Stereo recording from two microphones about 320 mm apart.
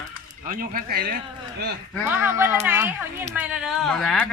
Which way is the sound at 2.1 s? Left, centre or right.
Centre.